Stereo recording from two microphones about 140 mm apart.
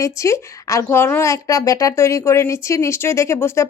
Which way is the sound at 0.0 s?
20° left (ahead or behind).